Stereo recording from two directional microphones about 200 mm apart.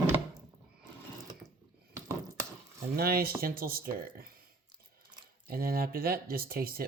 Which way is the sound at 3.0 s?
50° right (ahead or behind).